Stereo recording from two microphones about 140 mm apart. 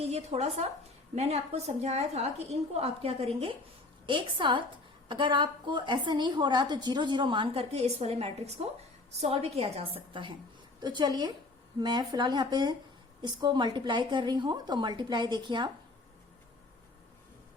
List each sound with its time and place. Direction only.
0.0 s a woman's voice: 50° right (ahead or behind); by 15.7 s 30° right (ahead or behind)